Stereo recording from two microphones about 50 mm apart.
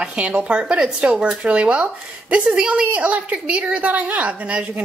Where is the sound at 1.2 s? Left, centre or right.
Right.